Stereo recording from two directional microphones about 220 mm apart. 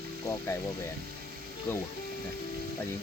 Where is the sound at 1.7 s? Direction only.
10° left (ahead or behind).